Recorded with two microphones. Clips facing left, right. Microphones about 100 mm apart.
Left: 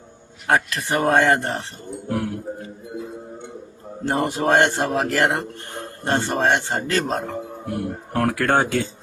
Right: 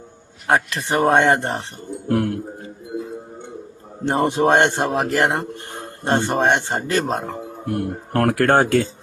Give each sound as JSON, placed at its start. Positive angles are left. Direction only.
{"t": 0.4, "sound": "a man's voice", "side_deg": -20}
{"t": 2.0, "sound": "speech", "side_deg": -60}
{"t": 4.0, "sound": "a man's voice", "side_deg": -25}
{"t": 7.6, "sound": "speech", "side_deg": -60}